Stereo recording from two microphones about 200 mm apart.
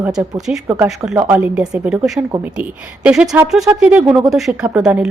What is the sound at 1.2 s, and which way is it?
Speech, 15° right (ahead or behind).